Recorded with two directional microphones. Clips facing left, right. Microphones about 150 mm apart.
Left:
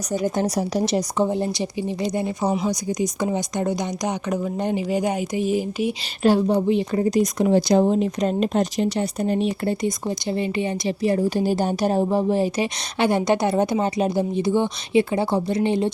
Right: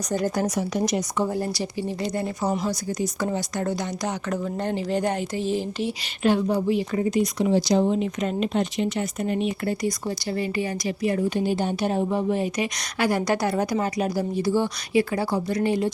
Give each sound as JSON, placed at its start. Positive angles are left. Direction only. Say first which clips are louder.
{"t": 0.4, "sound": "speech", "louder": "left 2 dB", "side_deg": 35}
{"t": 6.2, "sound": "speech", "louder": "left 3 dB", "side_deg": 35}
{"t": 7.0, "sound": "speech", "louder": "left 3 dB", "side_deg": 40}
{"t": 7.9, "sound": "speech", "louder": "left 4 dB", "side_deg": 40}